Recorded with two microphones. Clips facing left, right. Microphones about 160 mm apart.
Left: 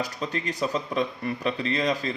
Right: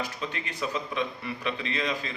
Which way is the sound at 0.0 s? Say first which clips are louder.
Left 4 dB; 40° left (ahead or behind).